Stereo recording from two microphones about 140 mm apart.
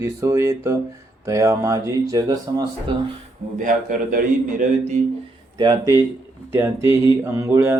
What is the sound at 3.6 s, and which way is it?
Speech, 75° right (ahead or behind).